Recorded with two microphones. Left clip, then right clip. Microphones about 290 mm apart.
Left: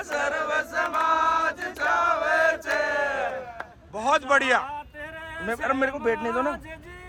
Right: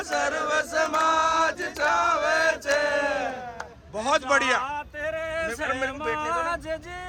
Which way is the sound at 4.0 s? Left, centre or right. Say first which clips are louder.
Left 1 dB; centre.